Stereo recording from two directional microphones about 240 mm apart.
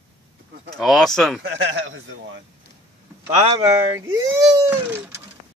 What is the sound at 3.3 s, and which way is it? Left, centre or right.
Speech, right.